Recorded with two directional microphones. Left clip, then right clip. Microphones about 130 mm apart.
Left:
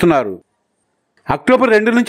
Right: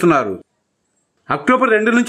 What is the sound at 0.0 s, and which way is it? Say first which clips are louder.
A man's voice: left 1 dB; 45° left (ahead or behind).